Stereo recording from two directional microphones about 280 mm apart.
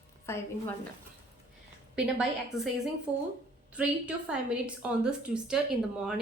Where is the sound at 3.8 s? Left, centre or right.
Centre.